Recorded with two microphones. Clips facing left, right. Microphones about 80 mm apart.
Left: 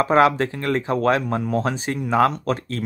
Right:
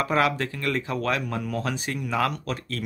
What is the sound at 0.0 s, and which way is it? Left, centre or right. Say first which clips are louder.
Speech: left 7 dB; left.